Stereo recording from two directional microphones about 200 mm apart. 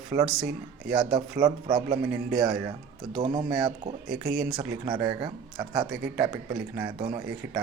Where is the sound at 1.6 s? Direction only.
25° right (ahead or behind).